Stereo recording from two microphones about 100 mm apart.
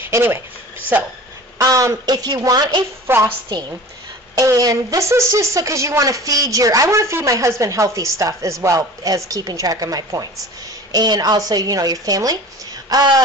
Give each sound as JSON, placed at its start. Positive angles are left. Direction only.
{"t": 0.0, "sound": "a sound", "side_deg": -20}
{"t": 1.6, "sound": "a woman's voice", "side_deg": -30}
{"t": 3.1, "sound": "a woman's voice", "side_deg": -25}
{"t": 3.4, "sound": "a woman's voice", "side_deg": -45}